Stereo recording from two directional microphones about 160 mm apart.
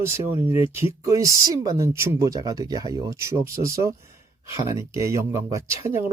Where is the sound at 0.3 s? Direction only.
35° left (ahead or behind).